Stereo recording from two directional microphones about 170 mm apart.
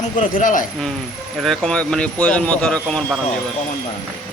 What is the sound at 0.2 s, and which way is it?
Speech, 50° left (ahead or behind).